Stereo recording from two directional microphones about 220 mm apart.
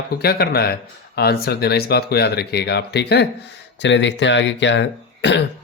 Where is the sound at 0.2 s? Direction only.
45° left (ahead or behind).